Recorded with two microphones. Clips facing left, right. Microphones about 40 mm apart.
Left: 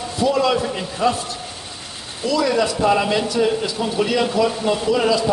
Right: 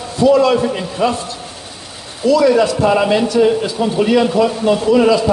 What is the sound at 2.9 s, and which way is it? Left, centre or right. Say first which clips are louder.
A man's voice: right 5 dB; right.